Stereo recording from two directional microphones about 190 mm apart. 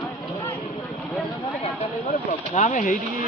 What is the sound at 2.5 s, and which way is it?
Speech, 45° left (ahead or behind).